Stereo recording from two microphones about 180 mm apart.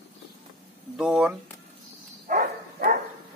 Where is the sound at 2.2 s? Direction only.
50° right (ahead or behind).